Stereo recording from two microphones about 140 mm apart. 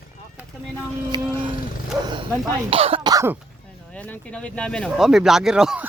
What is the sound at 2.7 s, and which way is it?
Speech, 45° right (ahead or behind).